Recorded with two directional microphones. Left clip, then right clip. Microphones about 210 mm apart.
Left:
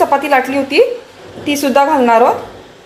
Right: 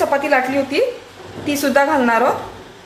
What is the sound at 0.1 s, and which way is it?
Speech, 35° left (ahead or behind).